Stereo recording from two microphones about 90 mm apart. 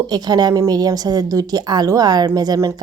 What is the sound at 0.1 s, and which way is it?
Speech, 50° right (ahead or behind).